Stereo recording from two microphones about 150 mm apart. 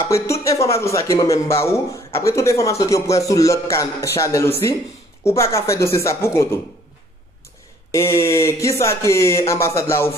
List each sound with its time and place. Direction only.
0.0 s speech: 20° left (ahead or behind)
7.9 s speech: 20° left (ahead or behind)